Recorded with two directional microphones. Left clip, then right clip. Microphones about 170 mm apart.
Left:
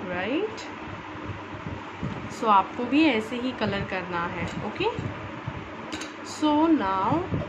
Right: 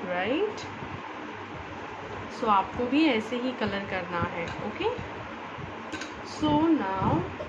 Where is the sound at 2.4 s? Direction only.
10° left (ahead or behind).